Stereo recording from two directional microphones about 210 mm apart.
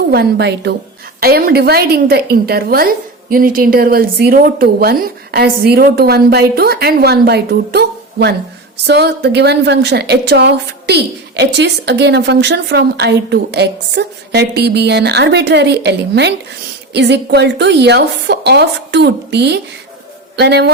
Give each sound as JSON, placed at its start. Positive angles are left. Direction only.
{"t": 0.1, "sound": "a woman's voice", "side_deg": -50}